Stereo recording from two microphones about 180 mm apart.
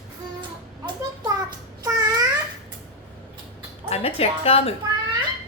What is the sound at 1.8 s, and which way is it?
Babbling, 20° right (ahead or behind).